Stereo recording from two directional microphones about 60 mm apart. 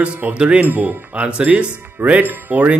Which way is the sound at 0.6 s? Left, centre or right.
Right.